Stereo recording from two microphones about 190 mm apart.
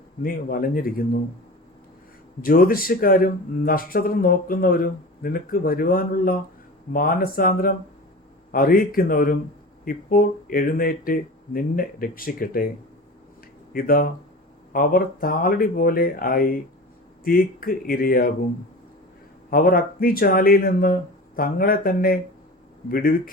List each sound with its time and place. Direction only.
0.2 s speech: 50° left (ahead or behind)
2.4 s speech: 50° left (ahead or behind)
13.7 s speech: 50° left (ahead or behind)
19.5 s speech: 50° left (ahead or behind)